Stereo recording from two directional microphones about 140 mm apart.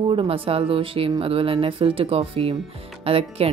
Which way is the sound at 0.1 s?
40° right (ahead or behind).